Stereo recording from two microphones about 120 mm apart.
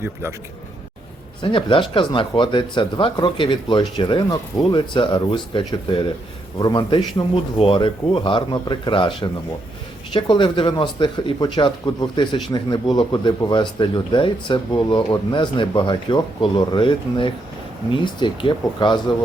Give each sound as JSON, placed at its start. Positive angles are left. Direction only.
{"t": 0.0, "sound": "speech", "side_deg": -20}
{"t": 1.4, "sound": "speech", "side_deg": 45}
{"t": 7.6, "sound": "speech", "side_deg": 45}